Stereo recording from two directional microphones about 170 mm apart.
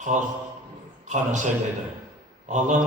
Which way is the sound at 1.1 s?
45° right (ahead or behind).